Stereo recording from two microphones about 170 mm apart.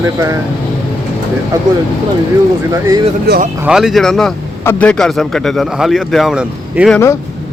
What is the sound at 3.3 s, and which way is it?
Speech, 75° right (ahead or behind).